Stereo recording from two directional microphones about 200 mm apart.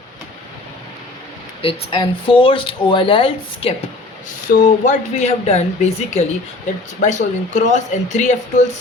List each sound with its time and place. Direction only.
1.6 s speech: 25° left (ahead or behind)